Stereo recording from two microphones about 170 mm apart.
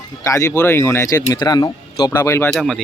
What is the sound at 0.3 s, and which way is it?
Speech, 20° left (ahead or behind).